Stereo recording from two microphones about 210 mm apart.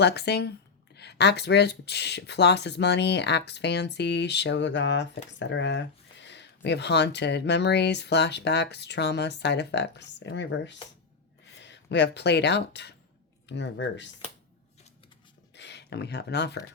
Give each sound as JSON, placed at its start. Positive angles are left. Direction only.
{"t": 0.0, "sound": "speech", "side_deg": 50}
{"t": 15.5, "sound": "speech", "side_deg": 55}